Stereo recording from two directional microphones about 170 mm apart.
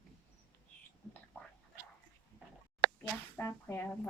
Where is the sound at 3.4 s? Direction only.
15° left (ahead or behind).